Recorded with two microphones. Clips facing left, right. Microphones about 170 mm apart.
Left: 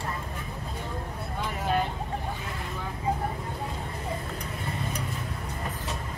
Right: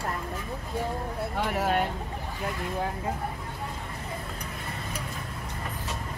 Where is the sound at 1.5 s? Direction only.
70° right (ahead or behind).